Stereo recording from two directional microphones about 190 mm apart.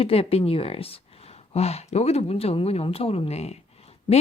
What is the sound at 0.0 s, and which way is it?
A woman's voice, 30° left (ahead or behind).